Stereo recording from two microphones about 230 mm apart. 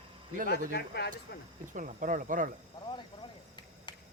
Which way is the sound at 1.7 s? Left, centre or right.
Right.